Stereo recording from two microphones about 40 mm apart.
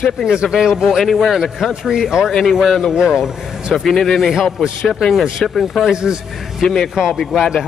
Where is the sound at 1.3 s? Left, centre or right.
Centre.